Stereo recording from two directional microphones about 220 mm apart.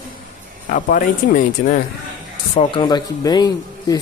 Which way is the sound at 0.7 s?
40° left (ahead or behind).